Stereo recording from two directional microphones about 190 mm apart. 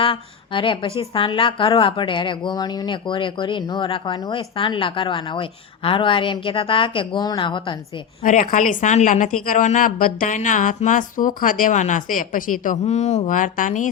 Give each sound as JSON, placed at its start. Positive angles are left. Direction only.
{"t": 0.0, "sound": "a woman's voice", "side_deg": 25}
{"t": 8.2, "sound": "a woman's voice", "side_deg": 45}